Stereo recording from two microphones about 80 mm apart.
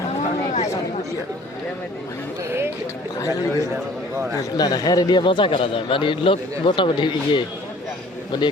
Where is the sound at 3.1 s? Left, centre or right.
Left.